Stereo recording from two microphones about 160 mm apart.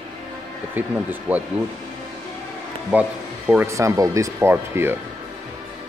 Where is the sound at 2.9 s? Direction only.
10° right (ahead or behind).